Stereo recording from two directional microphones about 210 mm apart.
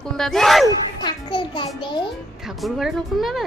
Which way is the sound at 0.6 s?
20° left (ahead or behind).